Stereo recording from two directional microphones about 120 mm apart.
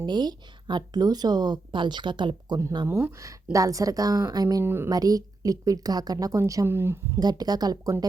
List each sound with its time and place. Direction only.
0.0 s speech: 35° right (ahead or behind)
2.8 s a woman's voice: 25° right (ahead or behind)
4.6 s a woman's voice: 20° right (ahead or behind)
4.9 s a woman's voice: 30° right (ahead or behind)
7.2 s speech: 35° right (ahead or behind)